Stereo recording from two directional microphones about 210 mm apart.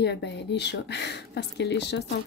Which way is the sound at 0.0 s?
55° left (ahead or behind).